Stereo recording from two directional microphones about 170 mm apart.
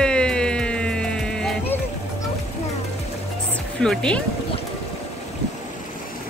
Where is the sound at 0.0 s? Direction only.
5° left (ahead or behind).